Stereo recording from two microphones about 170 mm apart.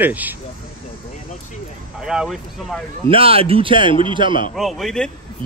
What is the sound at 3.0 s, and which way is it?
A man's voice, 35° right (ahead or behind).